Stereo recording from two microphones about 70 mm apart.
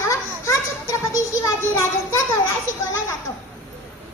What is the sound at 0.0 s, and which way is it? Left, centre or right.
Children playing, left.